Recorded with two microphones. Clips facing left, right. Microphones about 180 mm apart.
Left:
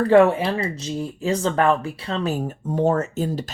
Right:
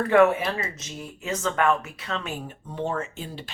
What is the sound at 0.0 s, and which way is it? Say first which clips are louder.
Speech: left 4 dB; 30° left (ahead or behind).